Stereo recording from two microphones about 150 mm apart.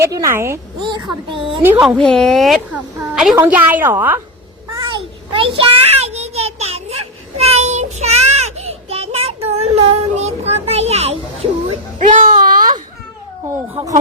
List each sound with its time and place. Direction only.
0.0 s speech: 20° right (ahead or behind)
0.9 s speech: 30° right (ahead or behind)
1.8 s a woman's voice: centre (ahead or behind)
4.7 s a sound: 35° right (ahead or behind)
11.9 s speech: 55° right (ahead or behind)
12.4 s baby cry: 65° right (ahead or behind)
13.7 s speech: 20° right (ahead or behind)